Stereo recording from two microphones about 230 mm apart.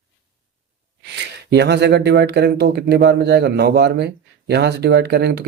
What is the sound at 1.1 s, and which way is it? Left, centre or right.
Speech, right.